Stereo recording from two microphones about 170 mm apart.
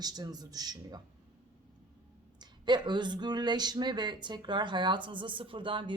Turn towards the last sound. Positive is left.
turn(degrees=-30)  # may be behind; listen again after turning